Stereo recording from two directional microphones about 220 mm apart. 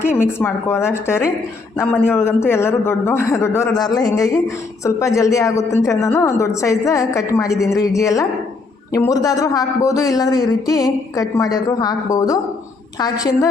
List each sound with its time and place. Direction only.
0.0 s speech: 10° left (ahead or behind)